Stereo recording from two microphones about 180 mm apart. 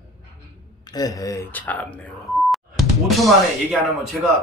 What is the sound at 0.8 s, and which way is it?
Speech, 20° left (ahead or behind).